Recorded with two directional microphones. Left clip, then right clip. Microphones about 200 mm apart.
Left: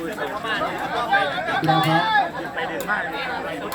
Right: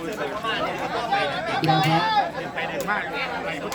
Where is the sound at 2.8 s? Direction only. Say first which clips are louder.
Left 1 dB; 45° right (ahead or behind).